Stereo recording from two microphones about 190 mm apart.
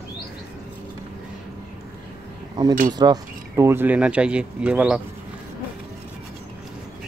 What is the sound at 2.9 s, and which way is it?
Speech, 20° right (ahead or behind).